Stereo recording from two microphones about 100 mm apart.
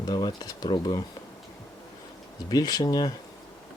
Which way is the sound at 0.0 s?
45° left (ahead or behind).